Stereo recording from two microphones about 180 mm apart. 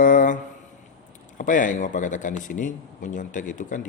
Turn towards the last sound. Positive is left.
turn(degrees=45)  # may be behind; listen again after turning